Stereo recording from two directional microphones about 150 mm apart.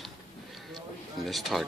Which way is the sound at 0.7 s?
Centre (ahead or behind).